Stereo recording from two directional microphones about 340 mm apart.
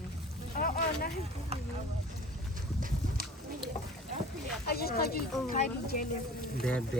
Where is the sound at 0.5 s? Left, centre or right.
Left.